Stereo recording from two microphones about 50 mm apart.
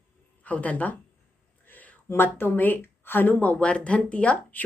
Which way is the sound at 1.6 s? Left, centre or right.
Left.